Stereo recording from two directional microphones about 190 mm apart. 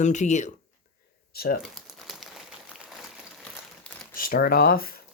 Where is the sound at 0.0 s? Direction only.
40° left (ahead or behind).